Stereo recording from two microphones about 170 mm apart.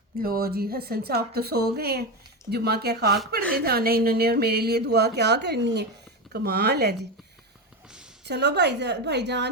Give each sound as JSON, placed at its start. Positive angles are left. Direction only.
{"t": 0.2, "sound": "a woman's voice", "side_deg": -60}
{"t": 6.3, "sound": "speech", "side_deg": -70}
{"t": 8.2, "sound": "a woman's voice", "side_deg": -90}